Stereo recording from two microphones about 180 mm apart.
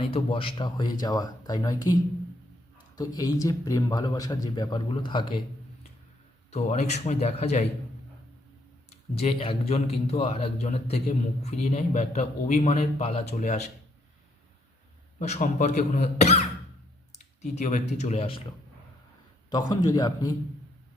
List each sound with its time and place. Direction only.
0.0 s a man's voice: 30° left (ahead or behind)
6.5 s a man's voice: 35° left (ahead or behind)
8.9 s a man's voice: 35° left (ahead or behind)
15.2 s a man's voice: 40° left (ahead or behind)
19.8 s a man's voice: 20° left (ahead or behind)